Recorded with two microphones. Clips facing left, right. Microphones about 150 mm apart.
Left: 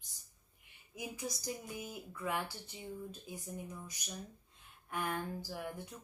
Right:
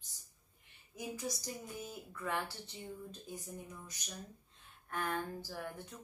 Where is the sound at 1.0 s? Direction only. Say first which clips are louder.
Right 1 dB; 10° left (ahead or behind).